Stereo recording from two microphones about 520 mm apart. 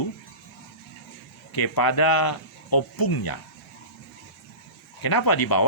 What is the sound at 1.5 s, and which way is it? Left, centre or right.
Speech, left.